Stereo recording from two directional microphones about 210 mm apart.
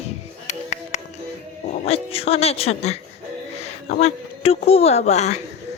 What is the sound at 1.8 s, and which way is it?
Speech, 30° left (ahead or behind).